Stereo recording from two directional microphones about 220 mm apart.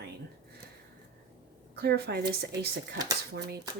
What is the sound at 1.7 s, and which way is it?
Speech, 45° right (ahead or behind).